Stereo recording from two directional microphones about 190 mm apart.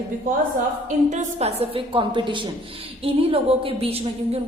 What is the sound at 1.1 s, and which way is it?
A woman's voice, 35° right (ahead or behind).